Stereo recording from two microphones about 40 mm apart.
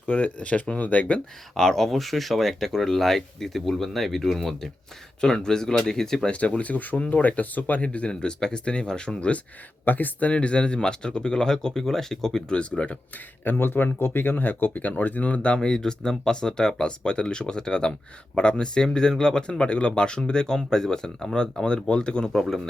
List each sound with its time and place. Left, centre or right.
0.1 s speech: left
1.5 s speech: centre
5.2 s speech: centre
6.6 s speech: left
8.1 s speech: left
9.8 s speech: left; by 12.5 s centre
12.5 s speech: left
13.4 s speech: left
22.3 s speech: centre